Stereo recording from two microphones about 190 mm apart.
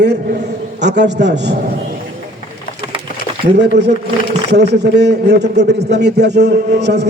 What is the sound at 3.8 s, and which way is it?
A man's voice, 65° right (ahead or behind).